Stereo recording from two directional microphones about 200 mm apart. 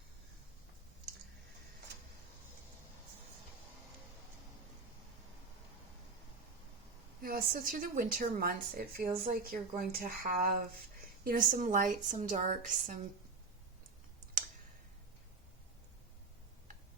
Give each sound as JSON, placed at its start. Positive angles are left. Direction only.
{"t": 7.2, "sound": "a woman's voice", "side_deg": -50}